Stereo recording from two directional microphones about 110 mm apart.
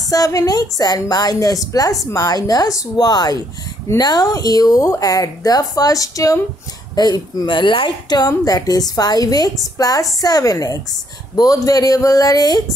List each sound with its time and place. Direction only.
0.1 s a woman's voice: 30° left (ahead or behind)